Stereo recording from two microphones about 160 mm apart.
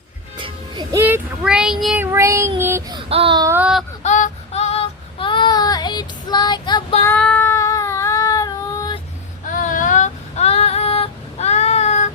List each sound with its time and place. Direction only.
0.3 s music: 30° right (ahead or behind)
1.0 s child singing: 10° right (ahead or behind)
2.0 s child singing: 15° right (ahead or behind)
2.9 s child singing: 35° right (ahead or behind)
3.4 s baby cry: 10° right (ahead or behind)
4.0 s child singing: 50° left (ahead or behind); by 6.8 s 25° left (ahead or behind)
7.0 s child singing: 10° left (ahead or behind)
9.5 s female singing: 55° left (ahead or behind)